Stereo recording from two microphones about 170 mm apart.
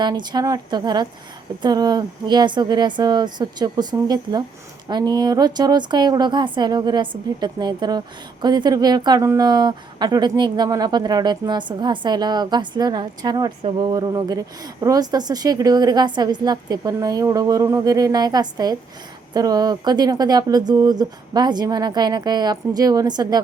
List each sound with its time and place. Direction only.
0.0 s a woman's voice: 25° right (ahead or behind)